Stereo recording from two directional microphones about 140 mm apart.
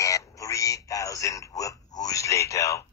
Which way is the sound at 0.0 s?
25° left (ahead or behind).